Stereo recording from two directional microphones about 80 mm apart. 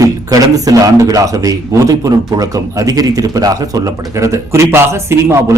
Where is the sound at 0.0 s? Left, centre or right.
Right.